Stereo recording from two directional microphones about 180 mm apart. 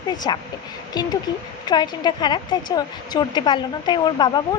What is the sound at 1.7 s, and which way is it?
Speech, 25° left (ahead or behind).